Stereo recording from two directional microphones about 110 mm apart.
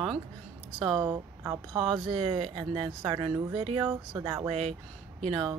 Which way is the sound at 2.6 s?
55° right (ahead or behind).